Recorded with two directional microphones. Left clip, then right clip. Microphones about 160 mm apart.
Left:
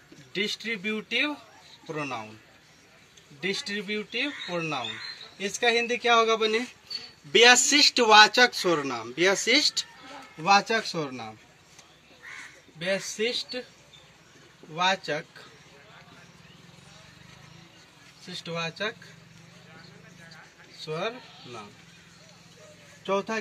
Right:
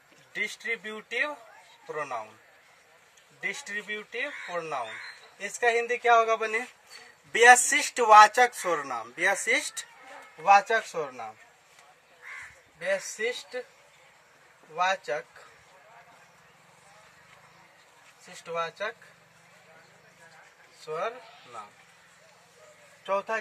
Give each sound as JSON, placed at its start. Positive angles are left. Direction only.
{"t": 0.3, "sound": "speech", "side_deg": -15}
{"t": 1.9, "sound": "speech", "side_deg": -10}
{"t": 3.3, "sound": "speech", "side_deg": -10}
{"t": 10.4, "sound": "a man's voice", "side_deg": -5}
{"t": 12.7, "sound": "a man's voice", "side_deg": -5}
{"t": 14.7, "sound": "a man's voice", "side_deg": 0}
{"t": 18.4, "sound": "a man's voice", "side_deg": -5}
{"t": 20.9, "sound": "speech", "side_deg": 5}